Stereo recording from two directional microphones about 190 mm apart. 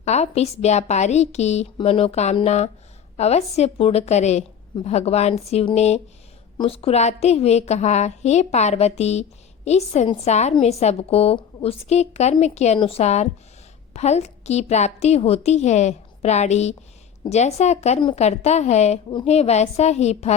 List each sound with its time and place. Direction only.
0.0 s a woman's voice: 35° left (ahead or behind)